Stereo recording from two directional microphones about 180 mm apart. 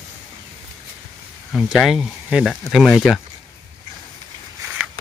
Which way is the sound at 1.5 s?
Centre (ahead or behind).